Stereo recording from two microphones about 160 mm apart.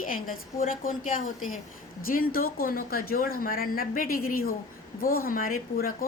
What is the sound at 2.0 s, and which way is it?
A woman's voice, 65° left (ahead or behind).